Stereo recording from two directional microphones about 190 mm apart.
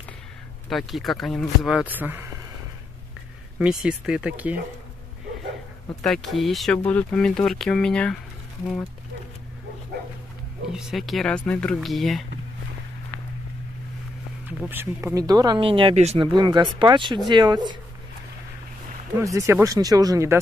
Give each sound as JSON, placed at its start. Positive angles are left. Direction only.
{"t": 0.7, "sound": "speech", "side_deg": 0}
{"t": 3.5, "sound": "speech", "side_deg": -5}
{"t": 6.0, "sound": "speech", "side_deg": 0}
{"t": 10.7, "sound": "speech", "side_deg": 0}
{"t": 14.7, "sound": "speech", "side_deg": -10}
{"t": 19.2, "sound": "speech", "side_deg": -15}